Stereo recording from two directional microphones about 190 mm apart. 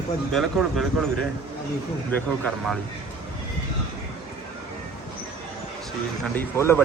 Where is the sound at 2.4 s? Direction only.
Centre (ahead or behind).